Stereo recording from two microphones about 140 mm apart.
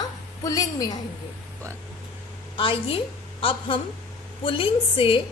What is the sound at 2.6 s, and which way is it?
A woman's voice, 35° left (ahead or behind).